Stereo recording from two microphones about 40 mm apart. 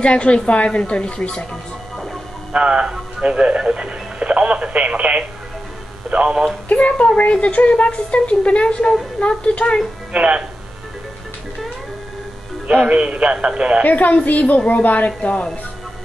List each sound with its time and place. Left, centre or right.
0.0 s a woman's voice: left
2.5 s speech: right
6.7 s a woman's voice: left
10.1 s speech: right
12.8 s speech: right
13.8 s a woman's voice: left
15.0 s speech: left